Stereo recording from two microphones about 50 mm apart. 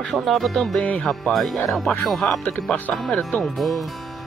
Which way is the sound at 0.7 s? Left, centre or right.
Left.